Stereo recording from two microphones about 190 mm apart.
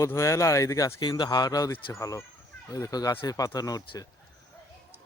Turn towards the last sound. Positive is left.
turn(degrees=20)  # may be behind; listen again after turning